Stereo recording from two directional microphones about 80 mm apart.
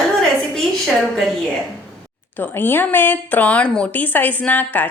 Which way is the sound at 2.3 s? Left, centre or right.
Left.